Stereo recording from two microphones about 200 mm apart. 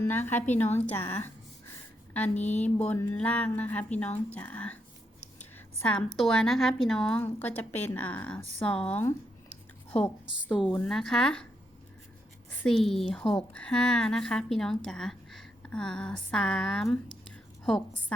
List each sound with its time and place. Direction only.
0.1 s a woman's voice: 10° left (ahead or behind)
2.3 s speech: 35° left (ahead or behind)
2.6 s a woman's voice: 5° left (ahead or behind)
10.5 s a woman's voice: 5° left (ahead or behind)
12.6 s a woman's voice: centre (ahead or behind)